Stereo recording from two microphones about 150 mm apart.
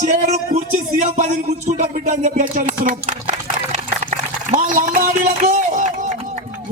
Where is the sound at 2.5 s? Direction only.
60° right (ahead or behind).